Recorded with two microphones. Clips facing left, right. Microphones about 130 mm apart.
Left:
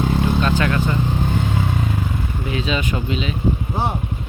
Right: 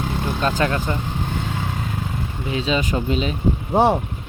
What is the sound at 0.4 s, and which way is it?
Speech, 30° right (ahead or behind).